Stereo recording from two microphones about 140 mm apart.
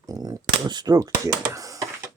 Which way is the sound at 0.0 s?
25° right (ahead or behind).